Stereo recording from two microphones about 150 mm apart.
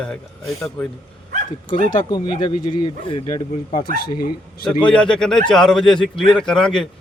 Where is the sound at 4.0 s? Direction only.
85° left.